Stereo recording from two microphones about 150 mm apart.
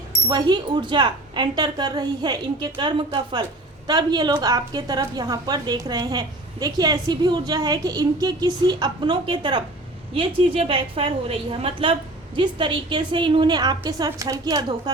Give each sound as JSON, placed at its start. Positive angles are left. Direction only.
{"t": 0.3, "sound": "a woman's voice", "side_deg": -30}